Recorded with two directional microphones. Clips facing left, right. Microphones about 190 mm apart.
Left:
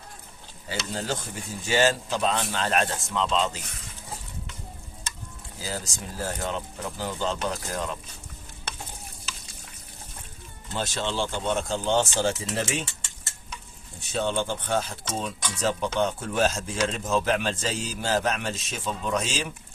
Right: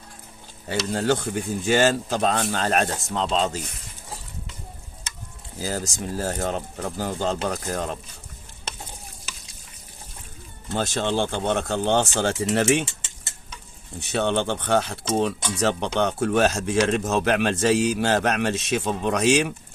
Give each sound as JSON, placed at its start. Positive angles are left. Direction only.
{"t": 0.7, "sound": "speech", "side_deg": -65}
{"t": 5.5, "sound": "speech", "side_deg": -45}
{"t": 10.8, "sound": "speech", "side_deg": -50}
{"t": 14.0, "sound": "speech", "side_deg": -70}